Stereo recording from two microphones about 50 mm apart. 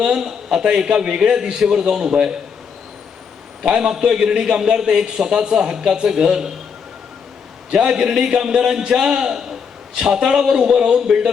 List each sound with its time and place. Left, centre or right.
0.0 s a man's voice: centre
3.6 s a man's voice: centre
7.7 s a man's voice: centre